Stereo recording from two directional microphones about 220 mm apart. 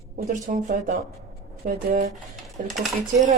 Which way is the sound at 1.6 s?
45° right (ahead or behind).